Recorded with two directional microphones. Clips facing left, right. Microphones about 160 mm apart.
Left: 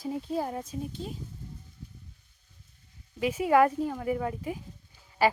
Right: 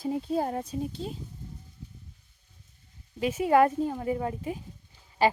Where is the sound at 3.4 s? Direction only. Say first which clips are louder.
Right 1 dB; 30° right (ahead or behind).